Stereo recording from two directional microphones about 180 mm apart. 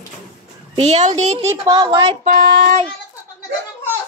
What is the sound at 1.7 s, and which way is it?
Speech, 25° right (ahead or behind).